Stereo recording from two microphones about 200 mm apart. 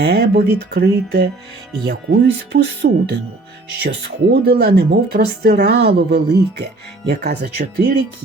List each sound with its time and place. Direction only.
0.0 s speech: 55° right (ahead or behind)